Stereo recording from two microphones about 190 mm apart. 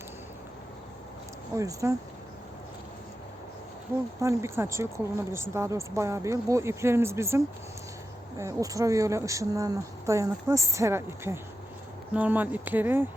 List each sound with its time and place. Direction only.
1.5 s speech: 15° right (ahead or behind)
4.2 s speech: 15° right (ahead or behind)